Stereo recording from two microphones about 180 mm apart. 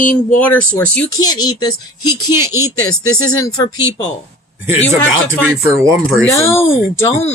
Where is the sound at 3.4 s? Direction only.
15° left (ahead or behind).